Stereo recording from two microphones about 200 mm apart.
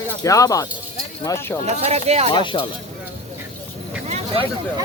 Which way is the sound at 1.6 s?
35° right (ahead or behind).